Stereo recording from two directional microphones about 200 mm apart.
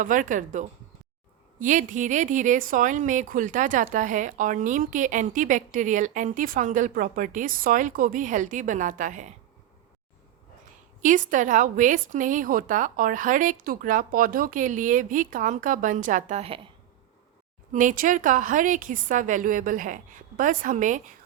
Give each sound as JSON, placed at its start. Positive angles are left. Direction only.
{"t": 0.0, "sound": "speech", "side_deg": -40}
{"t": 11.0, "sound": "speech", "side_deg": -40}
{"t": 17.7, "sound": "speech", "side_deg": -40}